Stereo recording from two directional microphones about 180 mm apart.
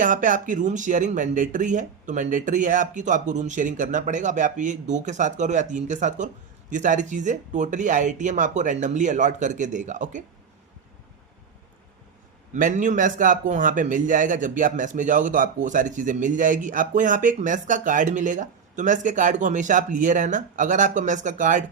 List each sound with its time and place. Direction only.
0.0 s speech: 45° right (ahead or behind)
12.5 s speech: 45° right (ahead or behind)